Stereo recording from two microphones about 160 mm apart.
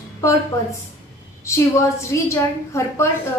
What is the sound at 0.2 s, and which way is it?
A woman's voice, 20° left (ahead or behind).